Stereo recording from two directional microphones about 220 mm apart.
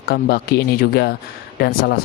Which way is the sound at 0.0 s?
45° left (ahead or behind).